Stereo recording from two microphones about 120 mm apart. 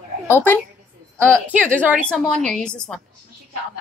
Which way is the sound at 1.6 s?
15° right (ahead or behind).